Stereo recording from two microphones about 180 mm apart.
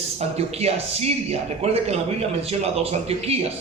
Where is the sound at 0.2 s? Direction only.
35° right (ahead or behind).